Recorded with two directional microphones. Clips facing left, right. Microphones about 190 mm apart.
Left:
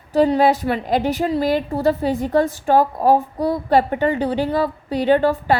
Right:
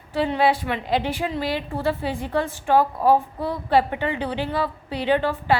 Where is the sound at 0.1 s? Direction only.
40° left (ahead or behind).